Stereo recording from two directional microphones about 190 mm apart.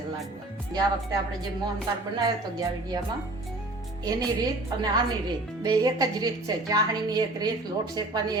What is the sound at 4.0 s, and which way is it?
Speech, 20° right (ahead or behind).